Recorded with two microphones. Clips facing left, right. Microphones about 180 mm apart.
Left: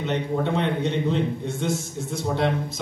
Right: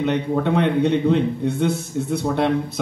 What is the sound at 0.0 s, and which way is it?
A man's voice, 60° right (ahead or behind).